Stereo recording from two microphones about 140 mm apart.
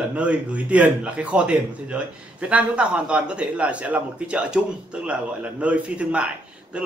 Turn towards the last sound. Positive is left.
turn(degrees=-10)  # may be behind; listen again after turning